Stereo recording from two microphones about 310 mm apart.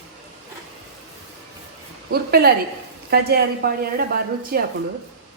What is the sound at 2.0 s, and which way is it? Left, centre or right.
A woman's voice, right.